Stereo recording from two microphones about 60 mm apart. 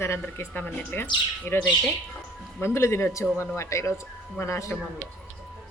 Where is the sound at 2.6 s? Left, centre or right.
Left.